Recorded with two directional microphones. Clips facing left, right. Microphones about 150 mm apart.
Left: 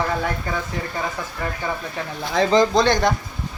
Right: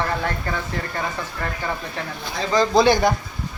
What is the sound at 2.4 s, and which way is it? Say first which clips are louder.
Speech: left 8 dB; 90° left.